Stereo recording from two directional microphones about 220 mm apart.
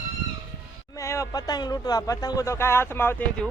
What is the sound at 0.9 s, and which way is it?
Speech, 15° left (ahead or behind).